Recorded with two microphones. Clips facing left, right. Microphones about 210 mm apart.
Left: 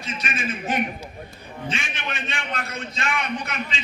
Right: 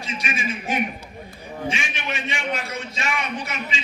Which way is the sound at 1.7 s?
55° left (ahead or behind).